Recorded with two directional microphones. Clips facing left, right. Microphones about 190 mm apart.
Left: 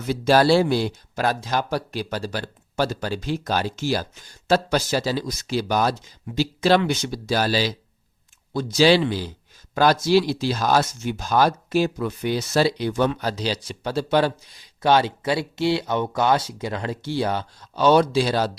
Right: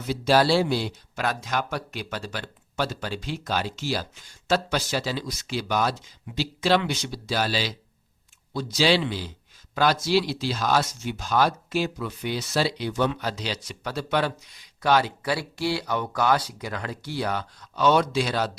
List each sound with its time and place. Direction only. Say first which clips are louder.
0.1 s speech: left 4 dB; 50° left (ahead or behind); by 18.5 s 35° left (ahead or behind)